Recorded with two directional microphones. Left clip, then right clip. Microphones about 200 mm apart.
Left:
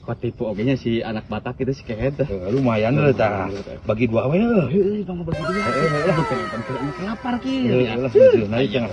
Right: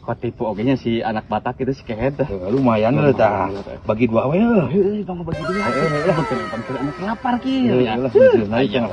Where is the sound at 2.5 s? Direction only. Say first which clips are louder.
Right 4 dB; 35° left (ahead or behind).